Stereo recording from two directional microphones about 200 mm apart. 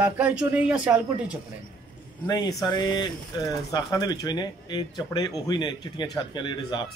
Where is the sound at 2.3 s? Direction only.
20° left (ahead or behind).